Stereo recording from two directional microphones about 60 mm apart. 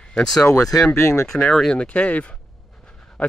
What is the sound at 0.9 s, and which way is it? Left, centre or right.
Speech, left.